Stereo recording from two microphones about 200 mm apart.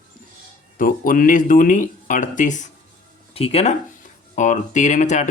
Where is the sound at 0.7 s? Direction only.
45° left (ahead or behind).